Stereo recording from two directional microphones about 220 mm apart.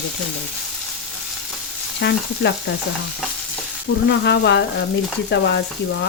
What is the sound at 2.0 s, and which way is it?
Speech, 50° left (ahead or behind).